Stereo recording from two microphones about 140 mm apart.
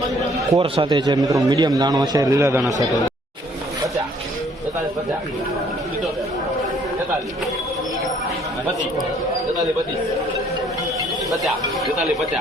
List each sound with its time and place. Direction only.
0.6 s a man's voice: 35° right (ahead or behind)